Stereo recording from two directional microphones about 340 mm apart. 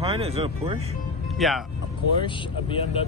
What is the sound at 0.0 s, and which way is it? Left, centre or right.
Speech, centre.